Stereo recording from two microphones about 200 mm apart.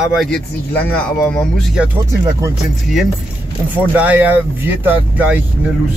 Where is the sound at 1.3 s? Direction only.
5° right (ahead or behind).